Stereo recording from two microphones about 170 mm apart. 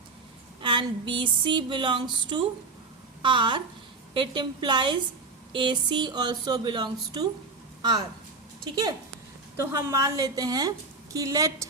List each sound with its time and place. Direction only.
0.6 s a woman's voice: 30° right (ahead or behind)